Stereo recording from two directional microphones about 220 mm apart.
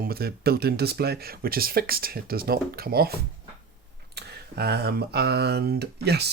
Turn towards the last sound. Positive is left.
turn(degrees=-50)  # may be behind; listen again after turning